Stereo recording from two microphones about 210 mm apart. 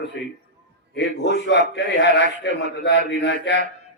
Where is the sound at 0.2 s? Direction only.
55° left (ahead or behind).